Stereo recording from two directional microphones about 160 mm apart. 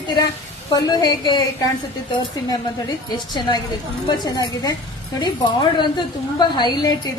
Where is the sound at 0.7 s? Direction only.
25° left (ahead or behind).